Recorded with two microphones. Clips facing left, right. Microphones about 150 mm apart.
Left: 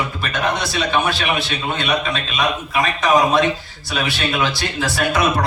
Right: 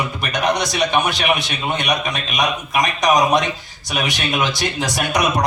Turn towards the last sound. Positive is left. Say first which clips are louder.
# left 1 dB
turn(degrees=-15)  # may be behind; listen again after turning